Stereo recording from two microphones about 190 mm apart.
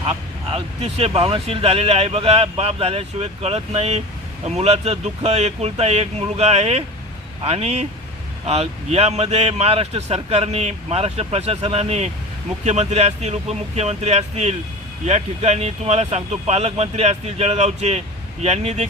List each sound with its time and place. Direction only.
0.5 s speech: 30° right (ahead or behind)